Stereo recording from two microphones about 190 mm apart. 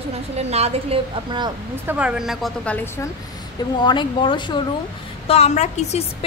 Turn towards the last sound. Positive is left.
turn(degrees=35)  # may be behind; listen again after turning